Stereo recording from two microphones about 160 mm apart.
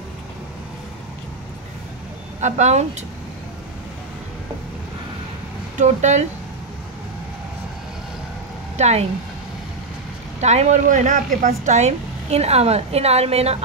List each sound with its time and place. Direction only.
2.4 s speech: 45° right (ahead or behind)
5.8 s speech: 45° right (ahead or behind)
8.7 s speech: 45° right (ahead or behind)
10.4 s speech: 45° right (ahead or behind)